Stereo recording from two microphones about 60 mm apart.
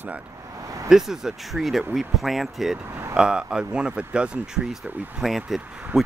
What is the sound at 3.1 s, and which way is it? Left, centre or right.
Speech, centre.